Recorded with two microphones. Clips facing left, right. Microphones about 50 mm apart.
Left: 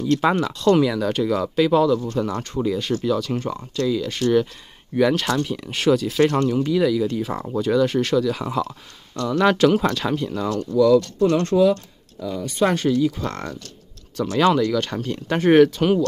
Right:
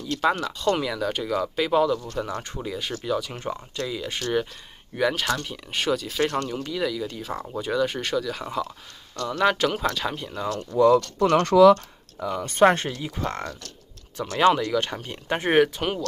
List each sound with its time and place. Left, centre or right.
0.0 s speech: centre
0.6 s speech: centre
4.9 s speech: centre
7.5 s speech: centre
11.1 s speech: right
11.7 s speech: right
12.6 s speech: right
14.4 s speech: centre